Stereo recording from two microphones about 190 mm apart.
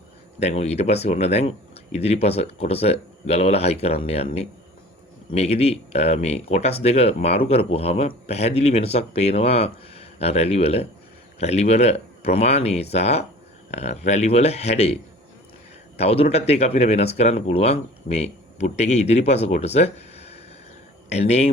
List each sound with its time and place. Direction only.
0.3 s speech: 35° left (ahead or behind)
16.0 s speech: 30° left (ahead or behind)